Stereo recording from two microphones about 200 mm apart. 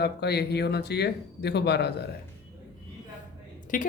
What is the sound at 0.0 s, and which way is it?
Speech, 55° left (ahead or behind).